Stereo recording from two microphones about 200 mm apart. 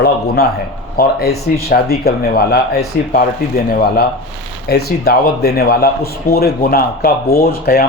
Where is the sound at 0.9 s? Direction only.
50° left (ahead or behind).